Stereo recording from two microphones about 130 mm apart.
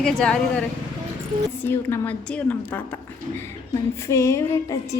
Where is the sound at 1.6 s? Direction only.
15° left (ahead or behind).